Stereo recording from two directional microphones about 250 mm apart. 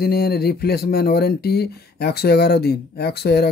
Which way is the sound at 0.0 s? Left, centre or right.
Left.